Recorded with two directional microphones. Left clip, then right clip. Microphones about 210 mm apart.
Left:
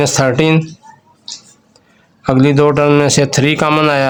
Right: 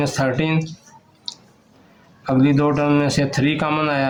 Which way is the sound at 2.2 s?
55° left (ahead or behind).